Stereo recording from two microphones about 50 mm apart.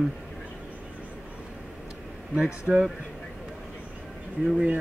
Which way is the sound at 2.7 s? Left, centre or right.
Left.